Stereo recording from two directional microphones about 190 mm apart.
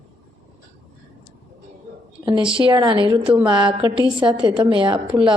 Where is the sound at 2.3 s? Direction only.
25° right (ahead or behind).